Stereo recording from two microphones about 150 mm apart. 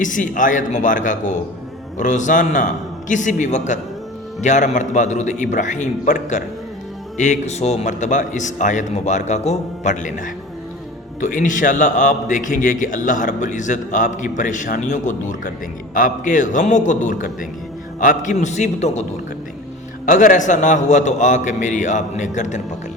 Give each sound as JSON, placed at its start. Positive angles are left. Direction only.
{"t": 0.0, "sound": "a man's voice", "side_deg": 60}
{"t": 20.1, "sound": "a man's voice", "side_deg": 60}